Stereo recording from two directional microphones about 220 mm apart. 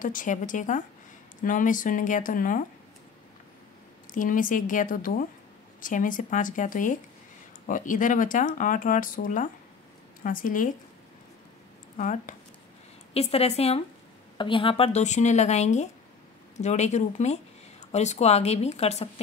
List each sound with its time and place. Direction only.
0.0 s speech: 35° left (ahead or behind)
4.1 s speech: 35° left (ahead or behind)
12.0 s speech: 35° left (ahead or behind)